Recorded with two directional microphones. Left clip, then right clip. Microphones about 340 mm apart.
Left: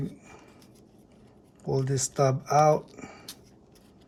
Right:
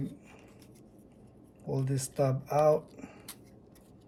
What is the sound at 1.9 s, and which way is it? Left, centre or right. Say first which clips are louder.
Speech: left 5 dB; left.